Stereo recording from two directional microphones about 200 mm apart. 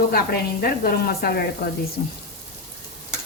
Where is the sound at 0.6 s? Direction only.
50° left (ahead or behind).